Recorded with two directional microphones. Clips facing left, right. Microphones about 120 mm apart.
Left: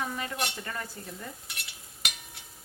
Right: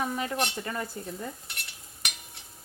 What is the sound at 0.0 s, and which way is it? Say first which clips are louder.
Stir: right 4 dB; 15° right (ahead or behind).